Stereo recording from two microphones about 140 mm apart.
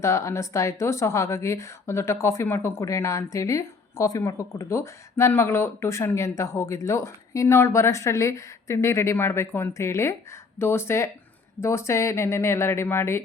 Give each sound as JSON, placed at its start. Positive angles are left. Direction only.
{"t": 0.0, "sound": "speech", "side_deg": 20}